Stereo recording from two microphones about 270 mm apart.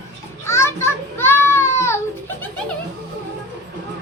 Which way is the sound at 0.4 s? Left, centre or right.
Centre.